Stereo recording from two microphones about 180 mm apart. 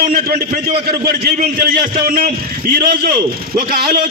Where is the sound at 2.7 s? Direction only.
50° right (ahead or behind).